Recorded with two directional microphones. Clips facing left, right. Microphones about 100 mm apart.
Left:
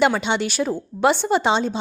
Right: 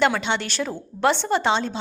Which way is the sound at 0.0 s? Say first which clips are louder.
Left 2 dB; 15° left (ahead or behind).